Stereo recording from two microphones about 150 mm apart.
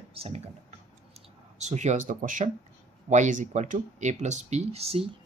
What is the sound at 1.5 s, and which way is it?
Speech, 50° right (ahead or behind).